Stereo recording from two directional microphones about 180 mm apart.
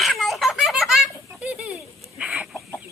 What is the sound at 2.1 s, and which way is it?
Chicken, 5° right (ahead or behind).